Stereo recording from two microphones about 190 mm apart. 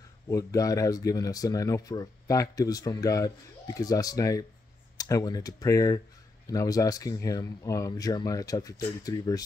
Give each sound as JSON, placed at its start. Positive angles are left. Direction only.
{"t": 0.3, "sound": "speech", "side_deg": 15}